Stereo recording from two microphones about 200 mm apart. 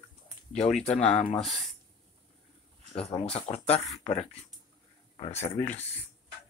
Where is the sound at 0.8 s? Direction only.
35° left (ahead or behind).